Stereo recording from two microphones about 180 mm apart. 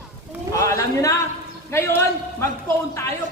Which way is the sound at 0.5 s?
15° left (ahead or behind).